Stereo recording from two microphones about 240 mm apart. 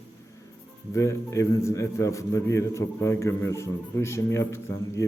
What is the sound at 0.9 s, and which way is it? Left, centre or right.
A man's voice, centre.